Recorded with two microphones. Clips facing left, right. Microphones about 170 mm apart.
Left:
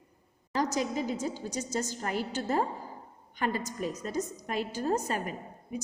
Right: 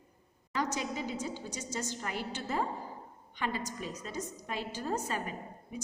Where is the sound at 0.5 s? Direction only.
40° left (ahead or behind).